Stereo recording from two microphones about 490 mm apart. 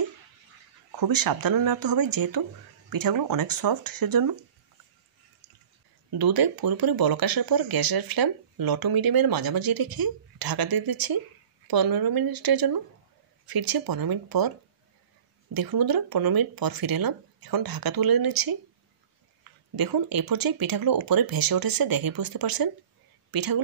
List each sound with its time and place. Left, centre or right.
0.9 s speech: right
6.1 s speech: right
15.5 s speech: right
19.7 s speech: right